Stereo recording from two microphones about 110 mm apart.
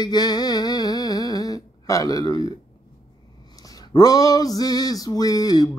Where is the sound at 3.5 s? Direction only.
35° left (ahead or behind).